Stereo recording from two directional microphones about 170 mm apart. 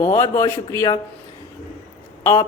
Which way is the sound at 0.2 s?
15° left (ahead or behind).